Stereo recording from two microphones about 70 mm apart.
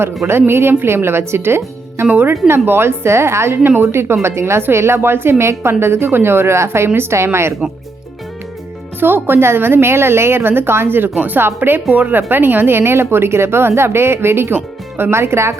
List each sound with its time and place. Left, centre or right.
0.3 s a woman's voice: right
7.6 s a woman's voice: right
9.0 s a woman's voice: right